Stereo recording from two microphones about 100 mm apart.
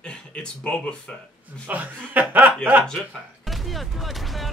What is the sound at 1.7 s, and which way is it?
Speech, 15° right (ahead or behind).